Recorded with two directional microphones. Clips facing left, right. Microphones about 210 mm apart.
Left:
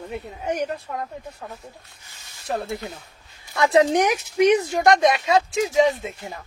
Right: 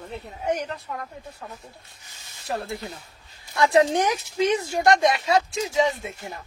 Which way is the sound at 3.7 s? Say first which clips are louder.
Left 3 dB; 20° left (ahead or behind).